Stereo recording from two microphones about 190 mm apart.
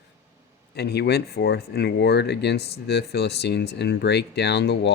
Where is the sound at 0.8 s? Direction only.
60° left (ahead or behind).